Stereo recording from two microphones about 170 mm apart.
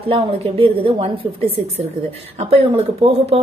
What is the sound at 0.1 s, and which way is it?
A woman's voice, 35° right (ahead or behind).